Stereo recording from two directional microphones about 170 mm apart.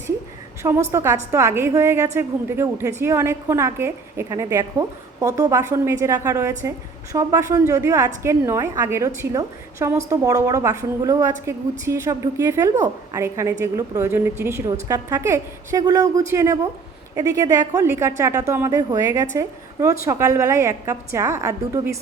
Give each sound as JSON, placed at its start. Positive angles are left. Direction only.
{"t": 0.6, "sound": "a woman's voice", "side_deg": -15}